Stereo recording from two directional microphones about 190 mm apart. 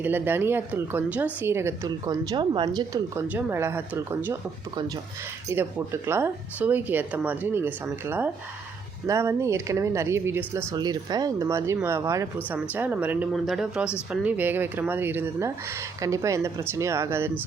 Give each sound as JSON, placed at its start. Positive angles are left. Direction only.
{"t": 0.0, "sound": "speech", "side_deg": -10}
{"t": 2.3, "sound": "speech", "side_deg": -25}
{"t": 5.5, "sound": "speech", "side_deg": -15}